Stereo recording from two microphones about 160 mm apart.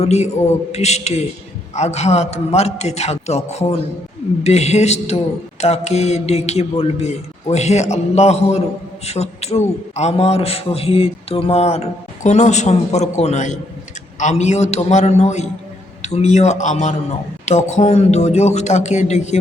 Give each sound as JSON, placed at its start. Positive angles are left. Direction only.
{"t": 0.0, "sound": "a man's voice", "side_deg": 45}